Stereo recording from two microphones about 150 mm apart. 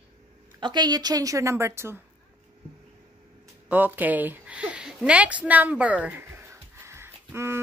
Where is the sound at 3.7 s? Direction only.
10° right (ahead or behind).